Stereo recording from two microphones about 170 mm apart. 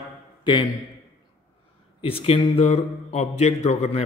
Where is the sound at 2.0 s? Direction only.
35° left (ahead or behind).